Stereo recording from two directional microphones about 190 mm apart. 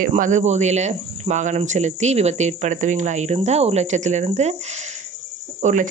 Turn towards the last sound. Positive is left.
turn(degrees=-40)  # may be behind; listen again after turning